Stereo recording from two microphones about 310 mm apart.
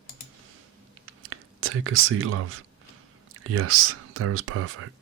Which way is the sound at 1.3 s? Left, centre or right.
Right.